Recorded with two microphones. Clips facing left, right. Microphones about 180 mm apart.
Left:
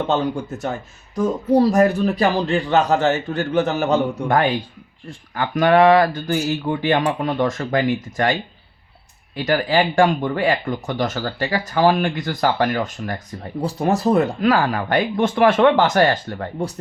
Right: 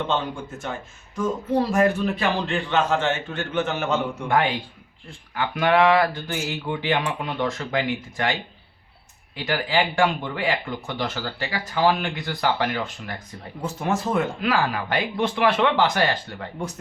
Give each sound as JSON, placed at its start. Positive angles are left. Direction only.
{"t": 0.1, "sound": "speech", "side_deg": 40}